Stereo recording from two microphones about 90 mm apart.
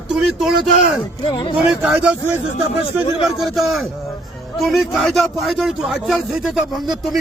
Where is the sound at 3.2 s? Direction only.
Centre (ahead or behind).